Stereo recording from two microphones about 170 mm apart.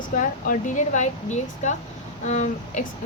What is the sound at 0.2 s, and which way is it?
Speech, 50° left (ahead or behind).